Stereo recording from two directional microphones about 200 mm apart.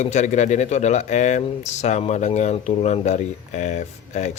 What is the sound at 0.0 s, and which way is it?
Speech, 35° left (ahead or behind).